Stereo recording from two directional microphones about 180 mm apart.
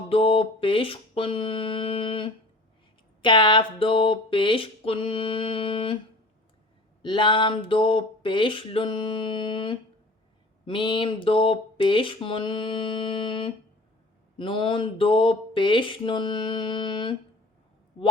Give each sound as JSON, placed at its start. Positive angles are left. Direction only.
{"t": 0.1, "sound": "speech", "side_deg": 30}
{"t": 7.0, "sound": "speech", "side_deg": 25}